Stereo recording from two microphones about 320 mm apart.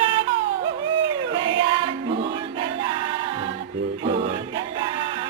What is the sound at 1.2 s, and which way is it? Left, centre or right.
Choir, centre.